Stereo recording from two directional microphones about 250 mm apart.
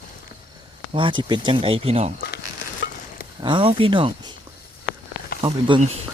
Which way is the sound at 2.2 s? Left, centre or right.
Left.